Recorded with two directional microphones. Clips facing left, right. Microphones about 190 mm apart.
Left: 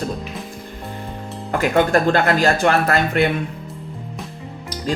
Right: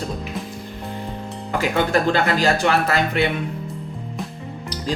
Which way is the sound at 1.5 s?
50° left (ahead or behind).